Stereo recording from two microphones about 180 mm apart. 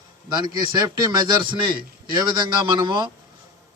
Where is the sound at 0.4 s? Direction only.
25° right (ahead or behind).